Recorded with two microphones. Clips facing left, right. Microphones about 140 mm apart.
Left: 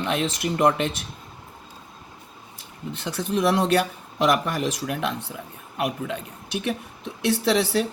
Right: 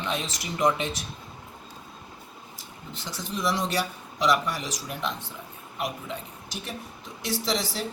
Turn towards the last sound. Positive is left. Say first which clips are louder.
# left 8 dB
turn(degrees=60)  # may be behind; listen again after turning